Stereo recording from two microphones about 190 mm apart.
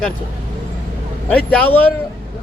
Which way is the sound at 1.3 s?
5° left (ahead or behind).